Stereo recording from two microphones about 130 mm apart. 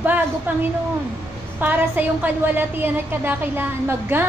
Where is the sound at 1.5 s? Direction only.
15° right (ahead or behind).